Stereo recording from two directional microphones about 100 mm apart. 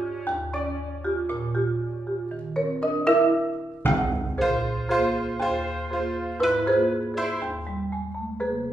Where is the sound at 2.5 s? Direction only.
10° left (ahead or behind).